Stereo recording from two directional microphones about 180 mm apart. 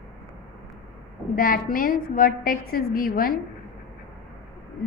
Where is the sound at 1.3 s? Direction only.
50° left (ahead or behind).